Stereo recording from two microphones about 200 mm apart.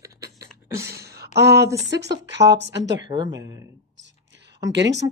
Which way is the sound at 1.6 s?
60° right (ahead or behind).